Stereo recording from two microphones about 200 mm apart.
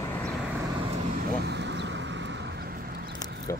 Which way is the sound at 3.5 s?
15° left (ahead or behind).